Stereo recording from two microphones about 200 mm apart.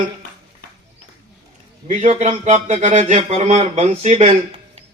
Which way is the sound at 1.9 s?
35° right (ahead or behind).